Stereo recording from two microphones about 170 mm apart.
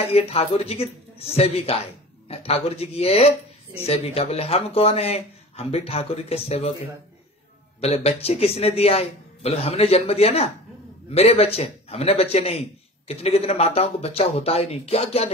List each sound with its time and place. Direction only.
0.0 s a man's voice: 35° left (ahead or behind)
7.8 s a man's voice: 35° left (ahead or behind)